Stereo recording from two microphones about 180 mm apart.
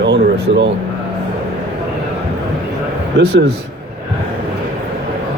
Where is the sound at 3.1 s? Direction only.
70° right (ahead or behind).